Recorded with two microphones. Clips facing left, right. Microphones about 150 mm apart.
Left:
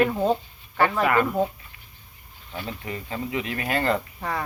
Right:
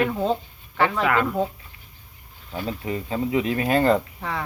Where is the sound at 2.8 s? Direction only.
20° right (ahead or behind).